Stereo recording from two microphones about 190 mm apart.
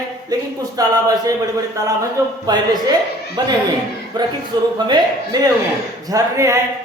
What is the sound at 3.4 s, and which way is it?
A man's voice, 20° right (ahead or behind).